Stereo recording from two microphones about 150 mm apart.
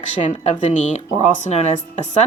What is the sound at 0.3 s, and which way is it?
Speech, 50° left (ahead or behind).